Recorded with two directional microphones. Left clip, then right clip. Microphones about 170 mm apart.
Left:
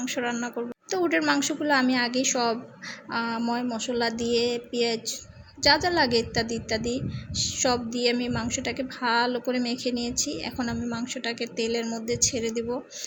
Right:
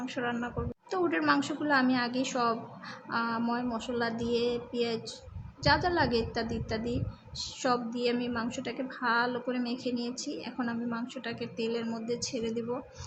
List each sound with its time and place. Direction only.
0.0 s a woman's voice: 20° left (ahead or behind)